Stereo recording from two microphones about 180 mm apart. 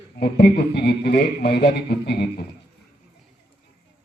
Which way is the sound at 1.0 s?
65° left (ahead or behind).